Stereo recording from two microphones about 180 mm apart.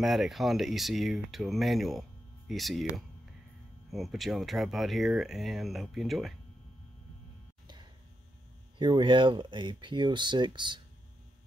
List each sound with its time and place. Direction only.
0.0 s speech: centre (ahead or behind)
8.7 s speech: 25° right (ahead or behind)